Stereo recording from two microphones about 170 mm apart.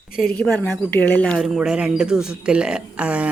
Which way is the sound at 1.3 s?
5° right (ahead or behind).